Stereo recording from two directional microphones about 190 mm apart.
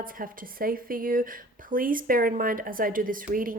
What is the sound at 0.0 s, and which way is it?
Speech, 50° right (ahead or behind).